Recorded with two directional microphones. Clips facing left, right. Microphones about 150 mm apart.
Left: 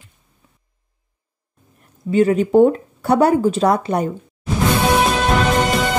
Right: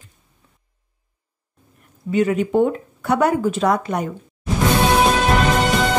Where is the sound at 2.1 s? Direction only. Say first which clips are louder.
Left 4 dB; 35° left (ahead or behind).